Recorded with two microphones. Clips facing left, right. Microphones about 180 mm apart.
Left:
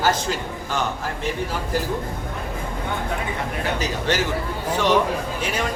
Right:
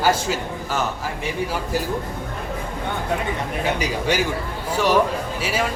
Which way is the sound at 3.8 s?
10° right (ahead or behind).